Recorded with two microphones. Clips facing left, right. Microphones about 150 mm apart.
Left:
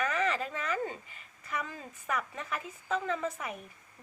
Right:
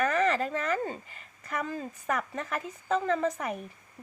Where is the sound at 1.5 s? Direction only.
40° right (ahead or behind).